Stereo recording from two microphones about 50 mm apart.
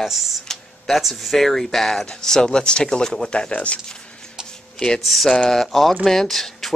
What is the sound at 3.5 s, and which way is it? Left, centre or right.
Speech, left.